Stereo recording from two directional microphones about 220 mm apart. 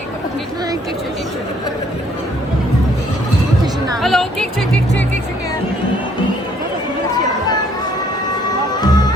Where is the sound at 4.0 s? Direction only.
Centre (ahead or behind).